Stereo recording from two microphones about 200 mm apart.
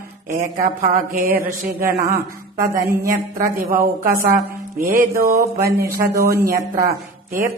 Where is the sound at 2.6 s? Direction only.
15° right (ahead or behind).